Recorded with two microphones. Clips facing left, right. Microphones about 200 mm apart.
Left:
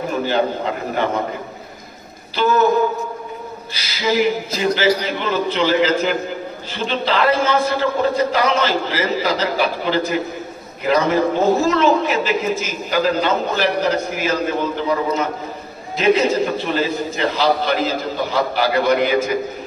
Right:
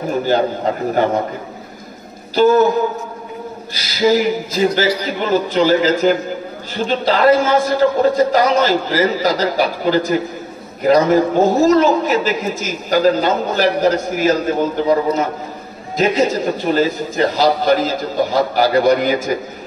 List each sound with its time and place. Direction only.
0.3 s a man's voice: 40° right (ahead or behind)
2.3 s a man's voice: 40° right (ahead or behind)
3.7 s a man's voice: 40° right (ahead or behind)